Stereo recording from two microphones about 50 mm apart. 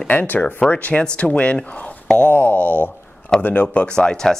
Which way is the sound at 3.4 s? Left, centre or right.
Left.